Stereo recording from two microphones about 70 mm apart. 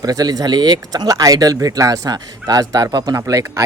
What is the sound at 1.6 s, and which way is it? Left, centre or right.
Speech, right.